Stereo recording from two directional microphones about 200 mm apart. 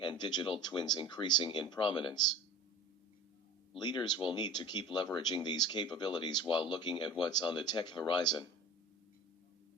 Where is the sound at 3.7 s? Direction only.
20° left (ahead or behind).